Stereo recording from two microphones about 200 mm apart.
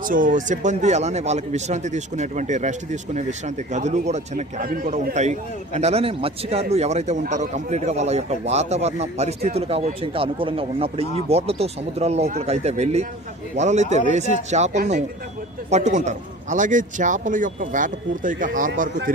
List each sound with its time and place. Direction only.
0.0 s a man's voice: 40° right (ahead or behind)